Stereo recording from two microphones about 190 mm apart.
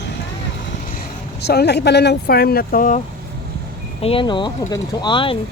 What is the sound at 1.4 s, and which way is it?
Speech, 60° left (ahead or behind).